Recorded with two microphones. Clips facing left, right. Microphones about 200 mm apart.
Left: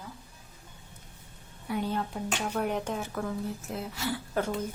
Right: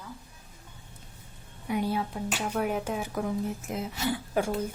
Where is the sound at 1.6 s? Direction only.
15° right (ahead or behind).